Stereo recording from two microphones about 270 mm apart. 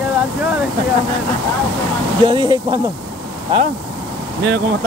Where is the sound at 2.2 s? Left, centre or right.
Centre.